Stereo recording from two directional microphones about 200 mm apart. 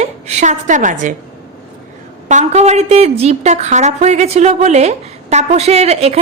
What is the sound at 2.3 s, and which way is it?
A woman's voice, 35° right (ahead or behind).